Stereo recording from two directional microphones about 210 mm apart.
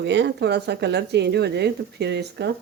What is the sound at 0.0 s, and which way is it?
Speech, 55° right (ahead or behind).